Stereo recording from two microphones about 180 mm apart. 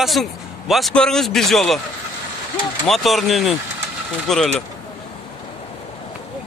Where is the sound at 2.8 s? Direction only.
Centre (ahead or behind).